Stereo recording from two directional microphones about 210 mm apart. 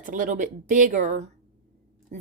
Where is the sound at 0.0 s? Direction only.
40° right (ahead or behind).